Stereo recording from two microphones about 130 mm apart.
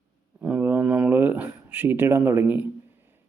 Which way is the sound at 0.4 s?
10° right (ahead or behind).